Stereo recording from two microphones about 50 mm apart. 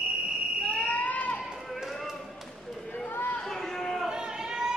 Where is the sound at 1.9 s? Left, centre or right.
Centre.